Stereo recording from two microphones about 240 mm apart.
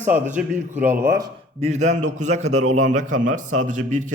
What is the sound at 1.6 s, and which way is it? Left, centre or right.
A man's voice, right.